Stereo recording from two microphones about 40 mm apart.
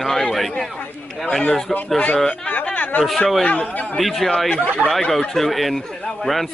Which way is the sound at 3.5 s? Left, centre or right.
Left.